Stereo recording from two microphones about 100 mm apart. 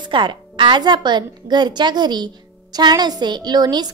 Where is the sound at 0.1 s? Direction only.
55° right (ahead or behind).